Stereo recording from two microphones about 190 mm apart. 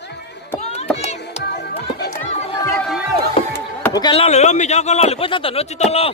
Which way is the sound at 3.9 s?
25° left (ahead or behind).